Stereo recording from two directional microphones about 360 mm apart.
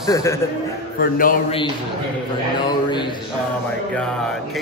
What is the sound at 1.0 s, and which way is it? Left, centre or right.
Speech, left.